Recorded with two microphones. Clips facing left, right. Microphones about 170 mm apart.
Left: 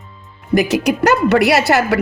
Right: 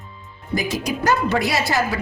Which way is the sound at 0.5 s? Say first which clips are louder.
Left 9 dB; 70° left (ahead or behind).